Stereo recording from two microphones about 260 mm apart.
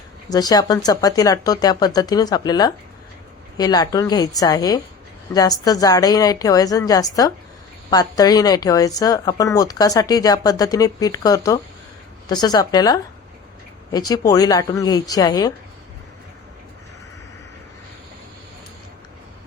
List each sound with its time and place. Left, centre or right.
0.3 s speech: centre